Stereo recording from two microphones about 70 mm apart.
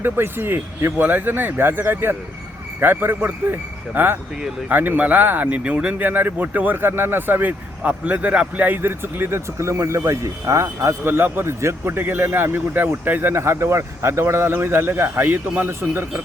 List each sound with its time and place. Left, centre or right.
0.0 s a man's voice: right